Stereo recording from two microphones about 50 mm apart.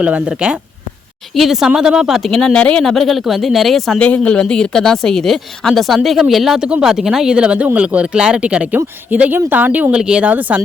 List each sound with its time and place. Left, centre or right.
0.0 s speech: right
1.4 s speech: centre
2.2 s speech: centre
2.8 s speech: centre
3.9 s speech: left; by 6.6 s centre
6.6 s speech: centre
6.8 s speech: centre
7.3 s speech: right
8.7 s speech: right
9.9 s speech: centre
10.2 s speech: right